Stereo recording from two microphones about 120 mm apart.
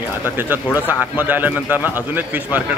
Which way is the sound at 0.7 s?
15° right (ahead or behind).